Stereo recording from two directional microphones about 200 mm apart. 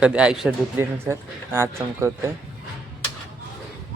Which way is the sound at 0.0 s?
5° right (ahead or behind).